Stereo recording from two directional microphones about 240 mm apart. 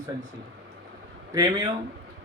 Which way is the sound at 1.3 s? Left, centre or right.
Centre.